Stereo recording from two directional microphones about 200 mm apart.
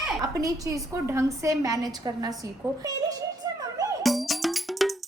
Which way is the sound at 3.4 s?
20° right (ahead or behind).